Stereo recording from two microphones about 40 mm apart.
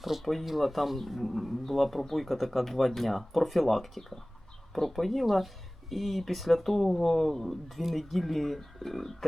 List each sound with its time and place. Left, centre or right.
0.0 s speech: centre